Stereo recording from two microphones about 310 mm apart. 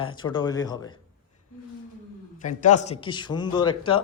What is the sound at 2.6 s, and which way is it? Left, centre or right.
A man's voice, left.